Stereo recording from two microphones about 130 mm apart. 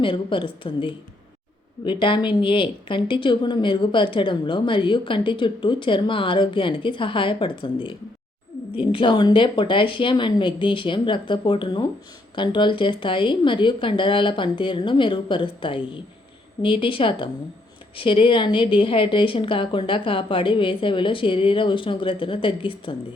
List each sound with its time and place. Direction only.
0.0 s a woman's voice: 40° left (ahead or behind)